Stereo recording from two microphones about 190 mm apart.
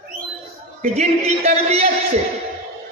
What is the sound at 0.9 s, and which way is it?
Speech, 35° right (ahead or behind).